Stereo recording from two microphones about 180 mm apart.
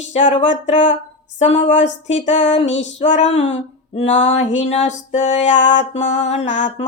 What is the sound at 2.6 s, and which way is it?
Speech, 90° left.